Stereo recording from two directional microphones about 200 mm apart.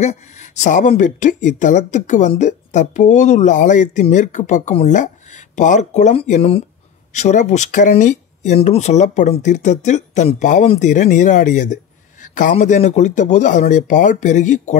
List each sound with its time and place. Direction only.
0.0 s speech: 35° left (ahead or behind)